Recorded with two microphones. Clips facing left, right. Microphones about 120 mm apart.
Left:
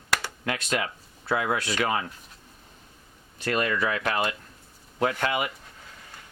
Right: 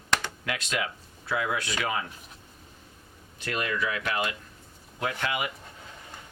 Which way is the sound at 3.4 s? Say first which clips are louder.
Left 4 dB; 40° left (ahead or behind).